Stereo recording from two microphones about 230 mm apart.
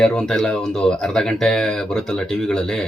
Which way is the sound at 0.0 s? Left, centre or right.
Centre.